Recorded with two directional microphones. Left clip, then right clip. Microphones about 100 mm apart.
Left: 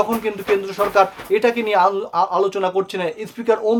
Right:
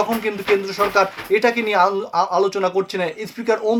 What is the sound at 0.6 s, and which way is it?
Speech, 50° left (ahead or behind).